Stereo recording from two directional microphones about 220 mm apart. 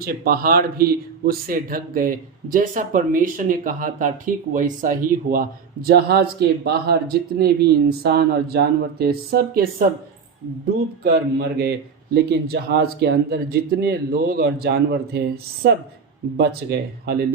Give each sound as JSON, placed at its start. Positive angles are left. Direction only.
{"t": 0.0, "sound": "speech", "side_deg": -45}
{"t": 11.0, "sound": "speech", "side_deg": -45}
{"t": 16.4, "sound": "speech", "side_deg": -45}